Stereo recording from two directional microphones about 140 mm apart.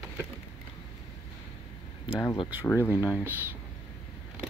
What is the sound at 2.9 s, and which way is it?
Speech, 10° right (ahead or behind).